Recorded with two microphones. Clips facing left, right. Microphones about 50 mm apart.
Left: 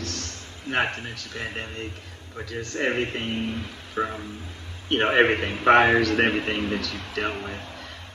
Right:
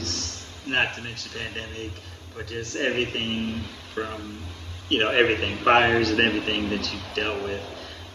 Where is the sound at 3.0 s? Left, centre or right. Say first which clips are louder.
Right 1 dB; right.